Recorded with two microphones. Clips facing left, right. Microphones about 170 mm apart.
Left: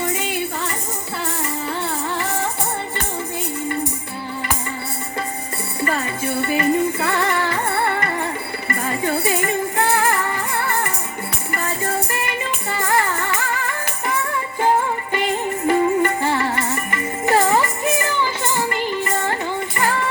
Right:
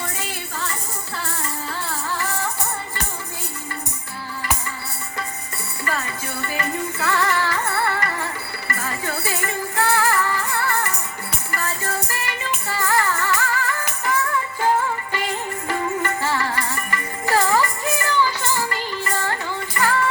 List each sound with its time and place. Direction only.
2.1 s music: 20° left (ahead or behind)
5.8 s music: 25° left (ahead or behind)